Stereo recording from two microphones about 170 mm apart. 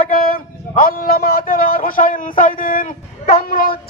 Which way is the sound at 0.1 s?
55° left (ahead or behind).